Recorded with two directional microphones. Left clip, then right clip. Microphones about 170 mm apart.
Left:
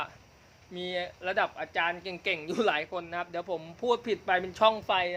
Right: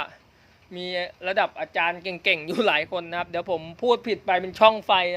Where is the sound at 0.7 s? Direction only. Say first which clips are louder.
Right 5 dB; 45° right (ahead or behind).